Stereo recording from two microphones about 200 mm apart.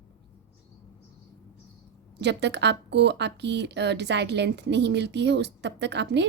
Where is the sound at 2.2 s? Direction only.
60° right (ahead or behind).